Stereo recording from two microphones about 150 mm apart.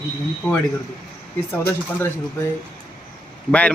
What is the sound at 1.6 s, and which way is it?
Speech, 15° left (ahead or behind).